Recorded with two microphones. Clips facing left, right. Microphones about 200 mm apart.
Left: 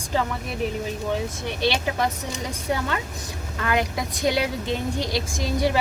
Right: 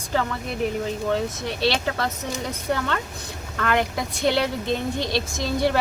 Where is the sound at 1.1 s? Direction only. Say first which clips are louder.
Right 2 dB; 10° left (ahead or behind).